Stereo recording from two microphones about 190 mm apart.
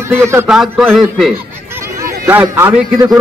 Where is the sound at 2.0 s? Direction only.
15° right (ahead or behind).